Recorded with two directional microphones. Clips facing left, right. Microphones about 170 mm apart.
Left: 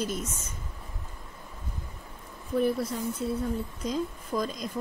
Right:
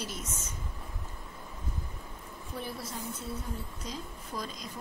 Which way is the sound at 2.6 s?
55° left (ahead or behind).